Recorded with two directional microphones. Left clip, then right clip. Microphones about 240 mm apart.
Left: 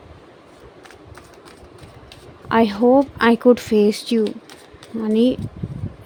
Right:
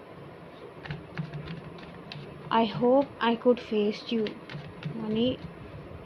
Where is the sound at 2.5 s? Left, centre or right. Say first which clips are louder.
Left 9 dB; left.